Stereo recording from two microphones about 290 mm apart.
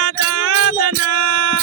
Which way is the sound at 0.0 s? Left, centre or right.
Right.